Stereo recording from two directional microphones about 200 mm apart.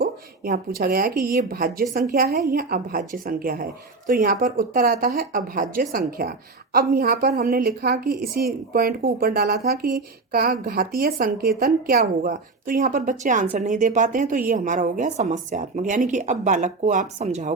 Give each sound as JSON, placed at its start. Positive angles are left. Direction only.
{"t": 0.0, "sound": "a woman's voice", "side_deg": -50}